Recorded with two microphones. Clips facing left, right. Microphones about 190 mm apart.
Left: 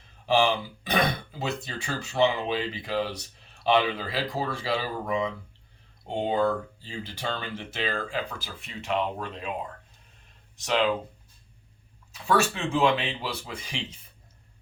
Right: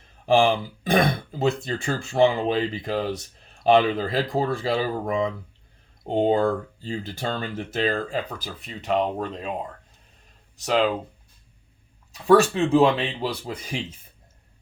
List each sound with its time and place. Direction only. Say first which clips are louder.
0.3 s speech: right 4 dB; 45° right (ahead or behind)
10.7 s speech: right 3 dB; 40° right (ahead or behind)
12.1 s speech: right 8 dB; 35° right (ahead or behind)